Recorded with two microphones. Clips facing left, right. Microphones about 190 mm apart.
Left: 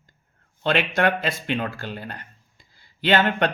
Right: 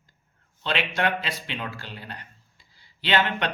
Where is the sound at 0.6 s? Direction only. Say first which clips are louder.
Left 5 dB; 50° left (ahead or behind).